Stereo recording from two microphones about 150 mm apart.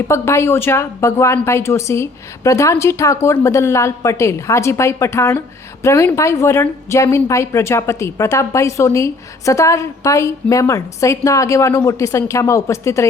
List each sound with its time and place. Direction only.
0.1 s a woman's voice: 15° left (ahead or behind)